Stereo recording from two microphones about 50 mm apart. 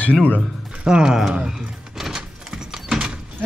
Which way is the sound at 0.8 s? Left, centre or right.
Centre.